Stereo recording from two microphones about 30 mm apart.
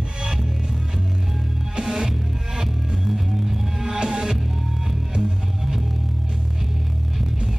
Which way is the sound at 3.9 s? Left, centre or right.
Right.